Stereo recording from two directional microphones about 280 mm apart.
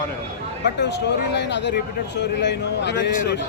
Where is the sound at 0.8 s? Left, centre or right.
Left.